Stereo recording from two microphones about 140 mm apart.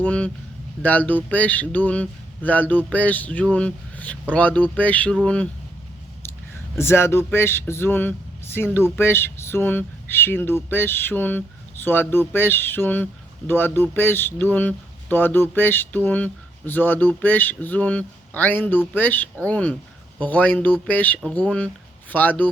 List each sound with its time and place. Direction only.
0.0 s a sound: 10° left (ahead or behind)
0.8 s speech: 10° left (ahead or behind)
6.7 s speech: 20° left (ahead or behind)